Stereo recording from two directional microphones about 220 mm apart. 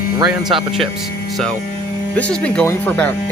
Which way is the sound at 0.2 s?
15° right (ahead or behind).